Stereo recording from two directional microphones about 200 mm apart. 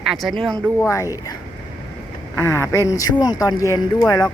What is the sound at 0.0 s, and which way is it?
Speech, centre (ahead or behind).